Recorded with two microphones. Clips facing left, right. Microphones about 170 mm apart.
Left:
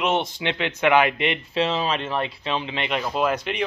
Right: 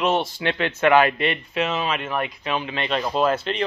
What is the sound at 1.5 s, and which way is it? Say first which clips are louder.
A man's voice: left 1 dB; 30° left (ahead or behind).